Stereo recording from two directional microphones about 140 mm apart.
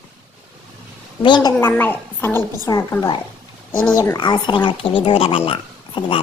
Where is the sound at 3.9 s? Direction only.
25° left (ahead or behind).